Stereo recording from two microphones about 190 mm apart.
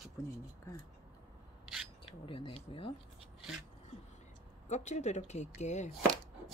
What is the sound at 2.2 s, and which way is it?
Speech, 25° left (ahead or behind).